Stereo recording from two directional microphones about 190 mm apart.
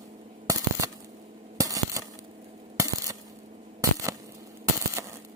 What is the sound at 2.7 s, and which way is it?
Coin, 15° right (ahead or behind).